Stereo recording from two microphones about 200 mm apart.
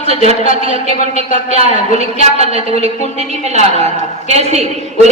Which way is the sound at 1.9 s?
30° right (ahead or behind).